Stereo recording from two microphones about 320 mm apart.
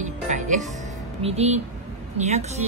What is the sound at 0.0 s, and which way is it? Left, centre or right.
Music, right.